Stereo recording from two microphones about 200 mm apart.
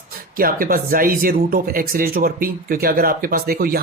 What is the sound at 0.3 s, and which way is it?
Speech, 45° right (ahead or behind).